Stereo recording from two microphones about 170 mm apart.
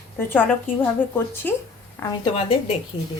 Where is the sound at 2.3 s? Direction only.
35° left (ahead or behind).